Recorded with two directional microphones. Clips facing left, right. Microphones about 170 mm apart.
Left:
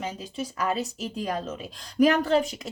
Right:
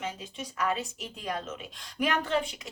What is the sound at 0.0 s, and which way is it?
Speech, 35° left (ahead or behind).